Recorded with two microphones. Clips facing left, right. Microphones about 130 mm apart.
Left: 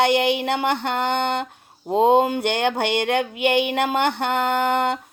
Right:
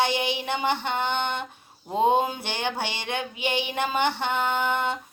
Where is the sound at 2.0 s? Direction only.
70° left (ahead or behind).